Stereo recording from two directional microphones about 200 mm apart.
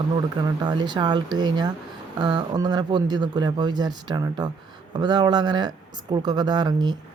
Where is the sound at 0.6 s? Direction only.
20° right (ahead or behind).